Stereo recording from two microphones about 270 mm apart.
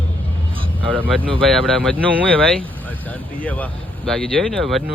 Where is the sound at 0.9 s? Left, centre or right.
Centre.